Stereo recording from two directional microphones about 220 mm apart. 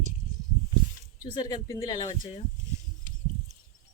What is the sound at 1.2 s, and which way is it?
Speech, 20° left (ahead or behind).